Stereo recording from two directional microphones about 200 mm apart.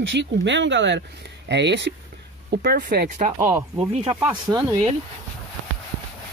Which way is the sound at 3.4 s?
15° right (ahead or behind).